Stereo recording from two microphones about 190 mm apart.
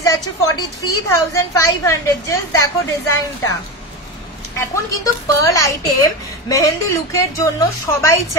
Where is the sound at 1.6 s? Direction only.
15° left (ahead or behind).